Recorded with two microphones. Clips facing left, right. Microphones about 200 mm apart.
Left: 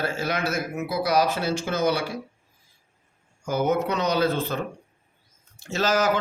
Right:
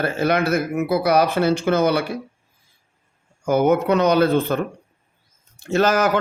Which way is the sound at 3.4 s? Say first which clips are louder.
Right 6 dB; 55° right (ahead or behind).